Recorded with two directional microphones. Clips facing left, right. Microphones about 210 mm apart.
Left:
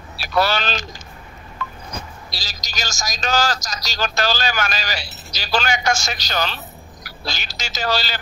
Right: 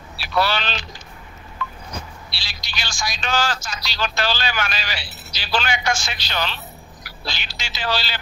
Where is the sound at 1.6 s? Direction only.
45° left (ahead or behind).